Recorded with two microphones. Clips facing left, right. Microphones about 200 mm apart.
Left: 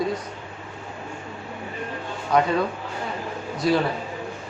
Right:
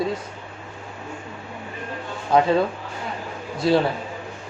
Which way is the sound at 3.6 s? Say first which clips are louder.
Right 2 dB; 25° right (ahead or behind).